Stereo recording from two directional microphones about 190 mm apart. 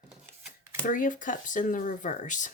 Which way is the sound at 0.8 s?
45° left (ahead or behind).